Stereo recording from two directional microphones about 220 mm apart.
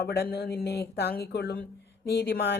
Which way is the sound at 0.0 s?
45° left (ahead or behind).